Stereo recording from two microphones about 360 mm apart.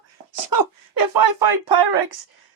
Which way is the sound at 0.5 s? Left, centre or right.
Right.